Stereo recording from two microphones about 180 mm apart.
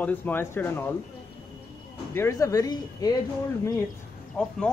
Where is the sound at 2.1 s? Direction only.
15° left (ahead or behind).